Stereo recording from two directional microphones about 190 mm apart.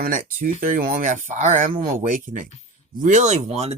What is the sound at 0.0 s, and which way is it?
Speech, 45° right (ahead or behind).